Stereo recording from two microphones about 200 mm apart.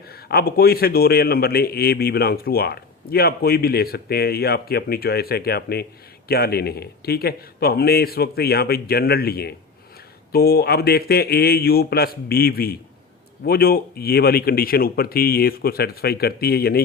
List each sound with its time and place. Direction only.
0.1 s a man's voice: 50° left (ahead or behind)